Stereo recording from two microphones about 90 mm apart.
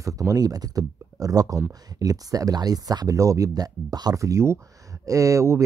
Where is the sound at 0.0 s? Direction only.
40° right (ahead or behind).